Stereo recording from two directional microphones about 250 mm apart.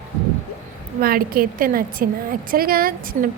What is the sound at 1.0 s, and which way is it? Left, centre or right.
A woman's voice, right.